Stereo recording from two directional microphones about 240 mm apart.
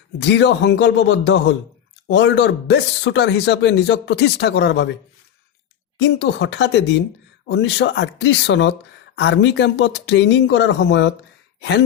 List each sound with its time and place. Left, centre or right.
0.2 s speech: left
6.0 s speech: left